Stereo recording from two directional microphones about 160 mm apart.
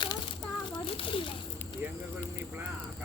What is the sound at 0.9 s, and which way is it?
Children playing, 35° left (ahead or behind).